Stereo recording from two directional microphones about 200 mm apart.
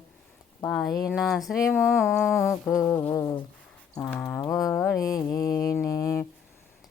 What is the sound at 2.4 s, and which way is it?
Mantra, 10° left (ahead or behind).